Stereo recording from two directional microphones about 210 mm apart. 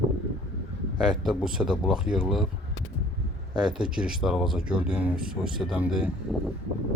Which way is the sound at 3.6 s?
5° right (ahead or behind).